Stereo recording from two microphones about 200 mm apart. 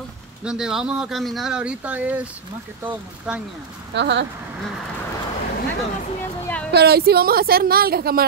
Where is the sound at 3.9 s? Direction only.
60° right (ahead or behind).